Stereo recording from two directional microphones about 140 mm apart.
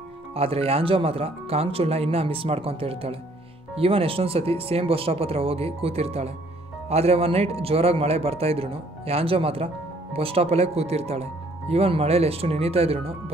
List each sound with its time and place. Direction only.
0.3 s speech: 45° right (ahead or behind)